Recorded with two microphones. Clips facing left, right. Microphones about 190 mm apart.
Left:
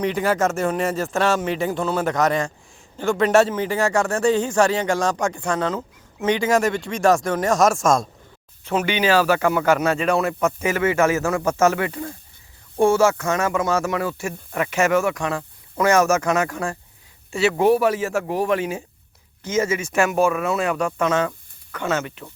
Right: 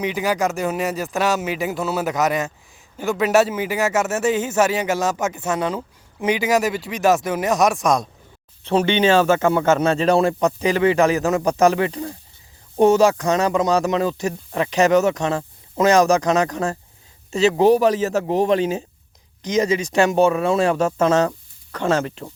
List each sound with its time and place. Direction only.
0.0 s speech: 5° right (ahead or behind)
5.3 s speech: 20° right (ahead or behind)
5.5 s speech: 10° right (ahead or behind)
8.6 s a man's voice: 30° right (ahead or behind)
18.0 s speech: 20° right (ahead or behind)
19.7 s speech: 30° right (ahead or behind)